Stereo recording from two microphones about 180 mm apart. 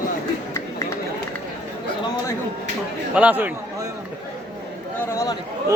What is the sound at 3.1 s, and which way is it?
Speech, 10° right (ahead or behind).